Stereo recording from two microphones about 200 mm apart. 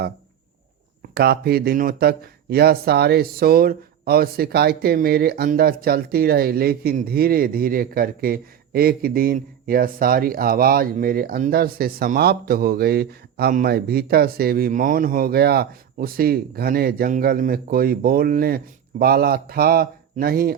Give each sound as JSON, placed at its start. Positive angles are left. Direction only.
{"t": 1.1, "sound": "speech", "side_deg": -50}